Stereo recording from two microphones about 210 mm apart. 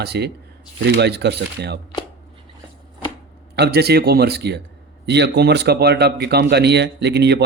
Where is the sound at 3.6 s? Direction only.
50° right (ahead or behind).